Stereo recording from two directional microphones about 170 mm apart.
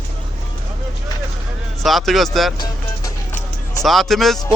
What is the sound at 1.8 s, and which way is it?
Speech, centre (ahead or behind).